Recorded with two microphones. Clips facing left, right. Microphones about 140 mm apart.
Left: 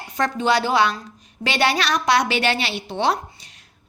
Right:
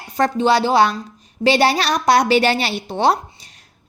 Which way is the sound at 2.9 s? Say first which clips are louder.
Right 4 dB; 40° right (ahead or behind).